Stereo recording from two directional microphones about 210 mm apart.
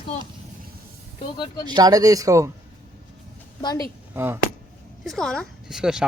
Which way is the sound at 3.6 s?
20° left (ahead or behind).